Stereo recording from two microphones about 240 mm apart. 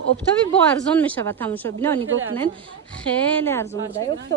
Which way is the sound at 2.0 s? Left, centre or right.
Right.